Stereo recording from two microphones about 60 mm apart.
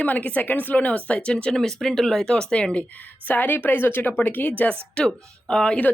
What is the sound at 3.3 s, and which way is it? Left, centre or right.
Speech, left.